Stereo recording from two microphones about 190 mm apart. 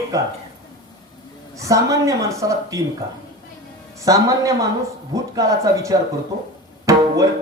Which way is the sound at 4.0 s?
15° right (ahead or behind).